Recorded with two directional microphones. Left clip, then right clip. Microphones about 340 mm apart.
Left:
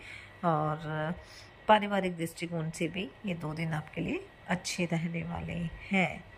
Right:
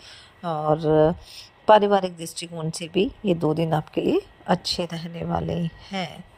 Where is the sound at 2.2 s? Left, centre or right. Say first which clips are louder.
Right 4 dB; centre.